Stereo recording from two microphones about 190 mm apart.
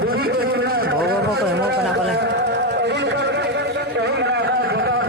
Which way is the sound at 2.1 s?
60° right (ahead or behind).